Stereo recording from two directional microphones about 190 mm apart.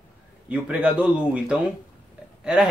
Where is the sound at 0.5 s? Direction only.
5° right (ahead or behind).